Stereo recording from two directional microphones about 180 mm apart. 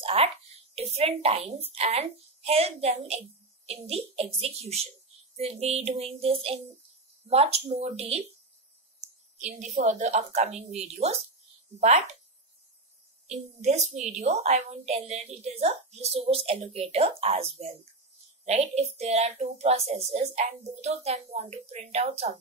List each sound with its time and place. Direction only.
0.0 s a sound: 35° right (ahead or behind)
0.7 s a woman's voice: 35° right (ahead or behind)
9.8 s a woman's voice: 45° right (ahead or behind)
13.3 s a woman's voice: 40° right (ahead or behind)